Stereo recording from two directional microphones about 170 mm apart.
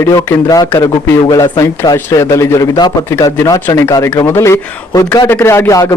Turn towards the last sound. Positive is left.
turn(degrees=15)  # may be behind; listen again after turning